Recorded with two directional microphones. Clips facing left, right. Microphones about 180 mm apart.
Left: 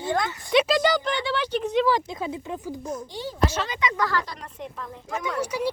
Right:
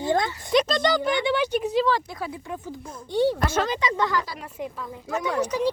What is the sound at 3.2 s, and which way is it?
Speech, 60° right (ahead or behind).